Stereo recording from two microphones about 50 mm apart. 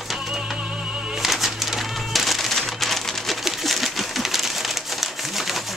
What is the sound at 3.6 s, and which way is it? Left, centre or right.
Crumpling, centre.